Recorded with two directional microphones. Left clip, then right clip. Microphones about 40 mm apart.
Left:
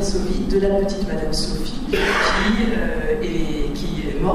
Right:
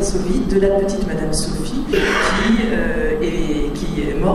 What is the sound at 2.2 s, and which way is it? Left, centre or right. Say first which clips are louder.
Speech: right 1 dB; right.